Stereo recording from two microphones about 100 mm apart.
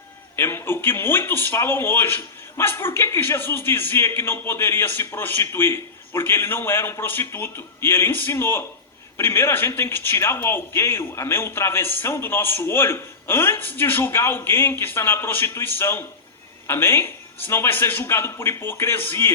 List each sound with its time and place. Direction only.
0.3 s a man's voice: 25° left (ahead or behind)